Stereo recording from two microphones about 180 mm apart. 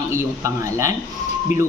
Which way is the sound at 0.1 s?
15° right (ahead or behind).